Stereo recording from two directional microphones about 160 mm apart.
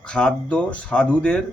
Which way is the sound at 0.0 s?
5° left (ahead or behind).